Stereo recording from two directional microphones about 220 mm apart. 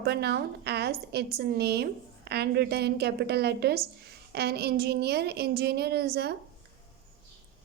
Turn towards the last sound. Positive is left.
turn(degrees=-45)  # may be behind; listen again after turning